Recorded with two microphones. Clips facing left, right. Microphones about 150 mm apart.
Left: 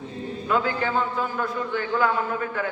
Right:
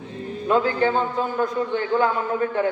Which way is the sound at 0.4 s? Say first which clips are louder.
Right 5 dB; 30° right (ahead or behind).